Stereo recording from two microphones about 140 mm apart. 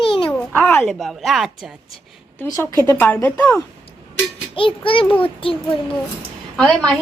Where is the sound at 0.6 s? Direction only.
10° left (ahead or behind).